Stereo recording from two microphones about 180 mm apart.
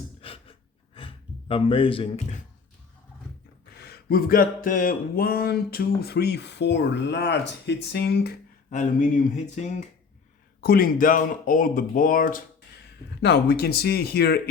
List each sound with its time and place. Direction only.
0.2 s pant: 30° left (ahead or behind)
0.9 s speech: 30° left (ahead or behind)
3.8 s a sound: 60° left (ahead or behind)
8.7 s speech: 45° left (ahead or behind)
10.6 s speech: 55° left (ahead or behind)
13.2 s a sound: 65° left (ahead or behind)